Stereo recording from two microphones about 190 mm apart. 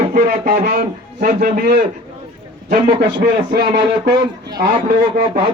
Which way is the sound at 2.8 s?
25° right (ahead or behind).